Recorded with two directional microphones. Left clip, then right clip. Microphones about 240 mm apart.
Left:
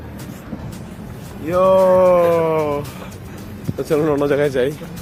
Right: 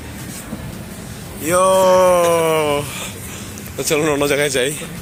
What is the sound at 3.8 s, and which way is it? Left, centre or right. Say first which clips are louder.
Speech: even; left.